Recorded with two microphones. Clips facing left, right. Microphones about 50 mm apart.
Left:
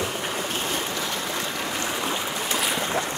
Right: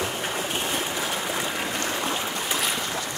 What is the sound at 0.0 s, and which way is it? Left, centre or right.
Boat, centre.